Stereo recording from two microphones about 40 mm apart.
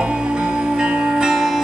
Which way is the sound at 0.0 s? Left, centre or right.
Right.